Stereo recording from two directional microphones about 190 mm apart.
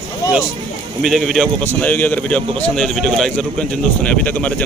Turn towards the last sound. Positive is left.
turn(degrees=5)  # may be behind; listen again after turning